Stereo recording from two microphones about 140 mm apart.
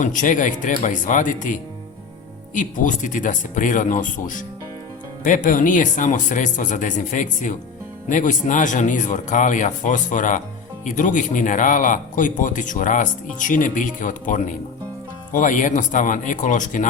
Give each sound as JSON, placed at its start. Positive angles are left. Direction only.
{"t": 0.0, "sound": "speech", "side_deg": 65}
{"t": 2.6, "sound": "speech", "side_deg": 65}